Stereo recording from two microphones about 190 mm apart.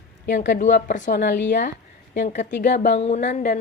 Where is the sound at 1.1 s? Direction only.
65° left (ahead or behind).